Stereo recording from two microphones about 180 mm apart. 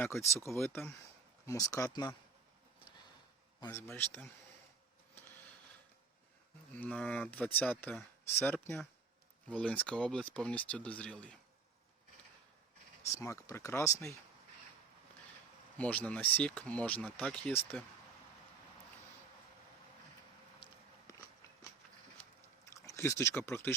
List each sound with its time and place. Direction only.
0.0 s speech: 15° left (ahead or behind)
3.6 s speech: 15° left (ahead or behind)
6.7 s speech: 5° left (ahead or behind)
13.1 s speech: 15° left (ahead or behind)
15.8 s speech: 5° left (ahead or behind)
20.6 s a sound: 30° left (ahead or behind)
22.9 s speech: 15° left (ahead or behind)